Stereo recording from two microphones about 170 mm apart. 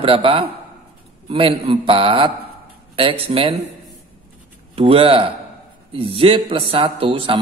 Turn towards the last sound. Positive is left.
turn(degrees=-30)  # may be behind; listen again after turning